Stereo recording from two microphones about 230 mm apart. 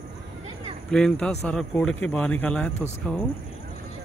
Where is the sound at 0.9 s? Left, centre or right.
Centre.